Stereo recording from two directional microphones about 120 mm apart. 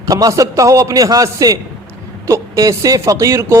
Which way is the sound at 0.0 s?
30° right (ahead or behind).